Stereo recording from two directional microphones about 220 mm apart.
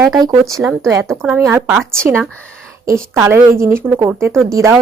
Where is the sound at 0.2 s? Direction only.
15° right (ahead or behind).